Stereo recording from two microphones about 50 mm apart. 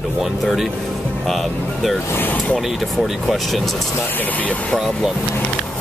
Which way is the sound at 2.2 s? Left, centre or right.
Left.